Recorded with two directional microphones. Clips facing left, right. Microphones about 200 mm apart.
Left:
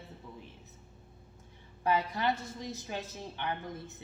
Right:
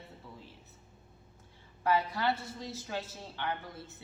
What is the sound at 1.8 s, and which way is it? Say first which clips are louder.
A woman's voice: even; 20° left (ahead or behind).